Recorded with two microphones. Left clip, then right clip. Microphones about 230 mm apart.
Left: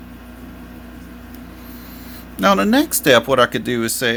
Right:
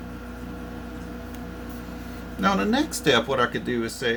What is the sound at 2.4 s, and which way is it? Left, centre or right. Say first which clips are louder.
Speech: left 8 dB; left.